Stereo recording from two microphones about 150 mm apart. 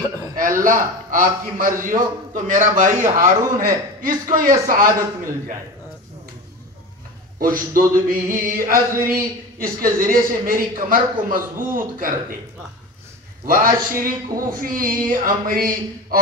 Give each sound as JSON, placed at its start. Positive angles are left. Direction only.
{"t": 0.4, "sound": "a man's voice", "side_deg": -65}
{"t": 7.3, "sound": "a man's voice", "side_deg": -70}
{"t": 13.5, "sound": "a man's voice", "side_deg": -70}